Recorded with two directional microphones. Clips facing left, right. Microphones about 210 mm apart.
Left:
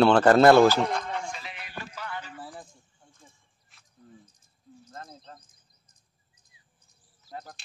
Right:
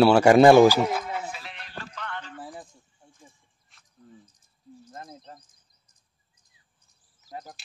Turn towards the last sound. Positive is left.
turn(degrees=-20)  # may be behind; listen again after turning